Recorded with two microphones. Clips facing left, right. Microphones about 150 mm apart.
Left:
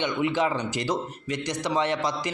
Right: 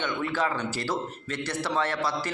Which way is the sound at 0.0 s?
20° left (ahead or behind).